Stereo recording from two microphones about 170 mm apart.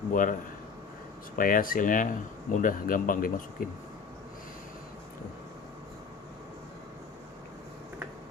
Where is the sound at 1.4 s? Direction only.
55° left (ahead or behind).